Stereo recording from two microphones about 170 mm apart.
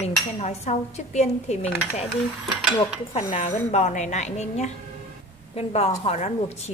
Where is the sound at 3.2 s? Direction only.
40° left (ahead or behind).